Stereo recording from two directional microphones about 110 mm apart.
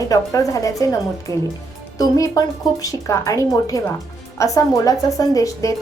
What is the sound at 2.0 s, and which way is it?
A woman's voice, 30° left (ahead or behind).